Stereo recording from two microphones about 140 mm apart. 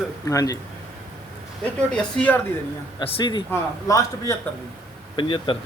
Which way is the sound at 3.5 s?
20° left (ahead or behind).